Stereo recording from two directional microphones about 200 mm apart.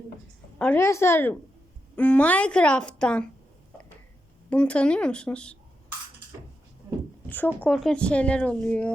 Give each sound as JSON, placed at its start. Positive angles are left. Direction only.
{"t": 0.6, "sound": "speech", "side_deg": 10}
{"t": 4.4, "sound": "speech", "side_deg": 5}
{"t": 7.3, "sound": "speech", "side_deg": 10}